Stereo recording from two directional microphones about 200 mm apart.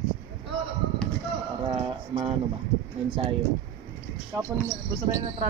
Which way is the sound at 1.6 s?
25° right (ahead or behind).